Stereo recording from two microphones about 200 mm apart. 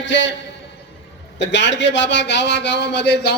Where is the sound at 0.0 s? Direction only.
65° left (ahead or behind).